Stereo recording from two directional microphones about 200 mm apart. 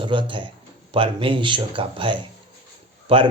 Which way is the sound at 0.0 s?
25° right (ahead or behind).